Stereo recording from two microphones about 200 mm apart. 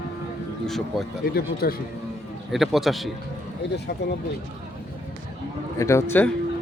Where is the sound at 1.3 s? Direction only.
50° left (ahead or behind).